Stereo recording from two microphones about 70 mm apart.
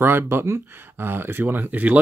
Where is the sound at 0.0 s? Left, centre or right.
Right.